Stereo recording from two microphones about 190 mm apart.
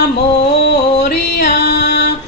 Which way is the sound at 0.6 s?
55° left (ahead or behind).